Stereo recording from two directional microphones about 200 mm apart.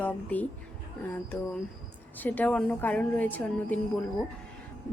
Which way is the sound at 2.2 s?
10° left (ahead or behind).